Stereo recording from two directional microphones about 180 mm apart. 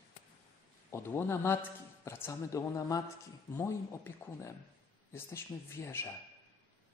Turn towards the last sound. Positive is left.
turn(degrees=15)  # may be behind; listen again after turning